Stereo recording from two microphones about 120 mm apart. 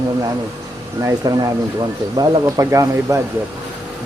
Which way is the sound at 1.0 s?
30° right (ahead or behind).